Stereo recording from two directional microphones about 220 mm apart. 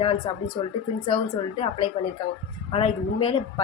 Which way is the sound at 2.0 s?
25° left (ahead or behind).